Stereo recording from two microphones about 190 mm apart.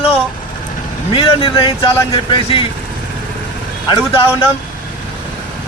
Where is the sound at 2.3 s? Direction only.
25° left (ahead or behind).